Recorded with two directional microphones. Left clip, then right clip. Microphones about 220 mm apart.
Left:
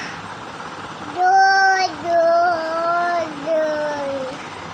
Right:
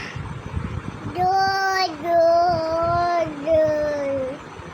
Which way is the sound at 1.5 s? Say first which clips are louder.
Left 6 dB; 25° right (ahead or behind).